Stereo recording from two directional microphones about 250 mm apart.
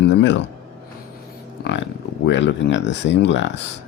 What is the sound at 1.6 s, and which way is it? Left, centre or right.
Music, left.